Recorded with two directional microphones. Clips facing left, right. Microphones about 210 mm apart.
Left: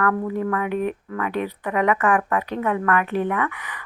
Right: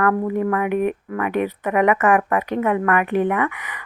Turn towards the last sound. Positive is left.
turn(degrees=-15)  # may be behind; listen again after turning